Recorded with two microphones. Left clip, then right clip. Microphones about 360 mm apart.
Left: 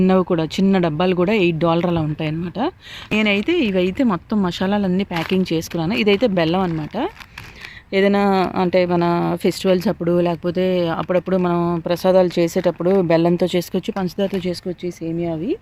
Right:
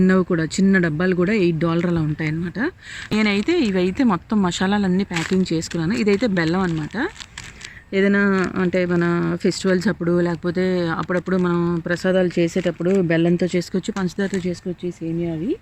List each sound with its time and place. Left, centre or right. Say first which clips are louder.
0.0 s speech: left 2 dB; centre
12.7 s speech: left 4 dB; left
13.3 s speech: left 2 dB; centre
15.2 s speech: left 2 dB; left